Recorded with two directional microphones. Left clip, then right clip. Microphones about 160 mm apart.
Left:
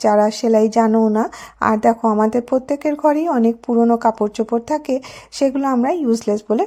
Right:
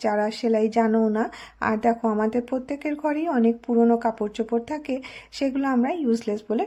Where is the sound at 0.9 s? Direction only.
25° left (ahead or behind).